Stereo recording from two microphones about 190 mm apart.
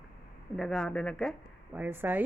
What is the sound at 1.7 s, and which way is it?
Speech, 10° right (ahead or behind).